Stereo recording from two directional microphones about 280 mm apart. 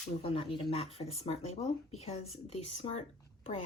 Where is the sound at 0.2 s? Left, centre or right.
Centre.